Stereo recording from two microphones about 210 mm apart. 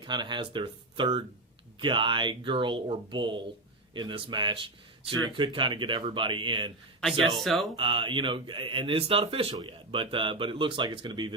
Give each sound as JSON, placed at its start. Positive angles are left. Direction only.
{"t": 0.0, "sound": "speech", "side_deg": -20}
{"t": 7.0, "sound": "speech", "side_deg": 0}
{"t": 7.8, "sound": "speech", "side_deg": -25}